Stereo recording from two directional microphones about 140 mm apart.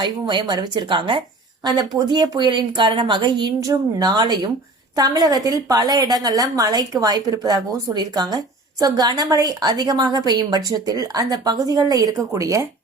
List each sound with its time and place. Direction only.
0.0 s a woman's voice: 35° right (ahead or behind)